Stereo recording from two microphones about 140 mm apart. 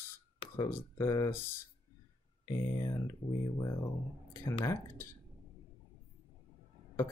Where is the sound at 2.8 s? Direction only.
25° left (ahead or behind).